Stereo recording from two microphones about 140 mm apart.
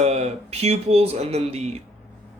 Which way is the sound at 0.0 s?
50° right (ahead or behind).